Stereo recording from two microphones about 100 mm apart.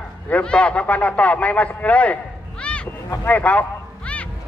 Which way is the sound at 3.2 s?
15° left (ahead or behind).